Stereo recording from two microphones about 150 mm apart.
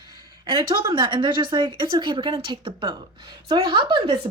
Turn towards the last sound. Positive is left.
turn(degrees=-35)  # may be behind; listen again after turning